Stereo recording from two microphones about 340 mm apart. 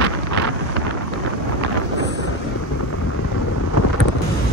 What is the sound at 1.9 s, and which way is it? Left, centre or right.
Vehicle, right.